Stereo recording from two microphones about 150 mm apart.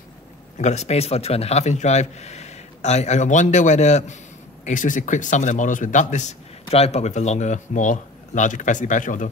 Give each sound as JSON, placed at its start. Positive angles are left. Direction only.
{"t": 0.6, "sound": "a man's voice", "side_deg": 50}